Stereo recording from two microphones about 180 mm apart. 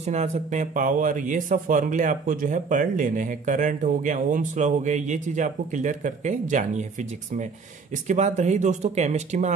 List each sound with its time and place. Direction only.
0.0 s speech: 40° right (ahead or behind)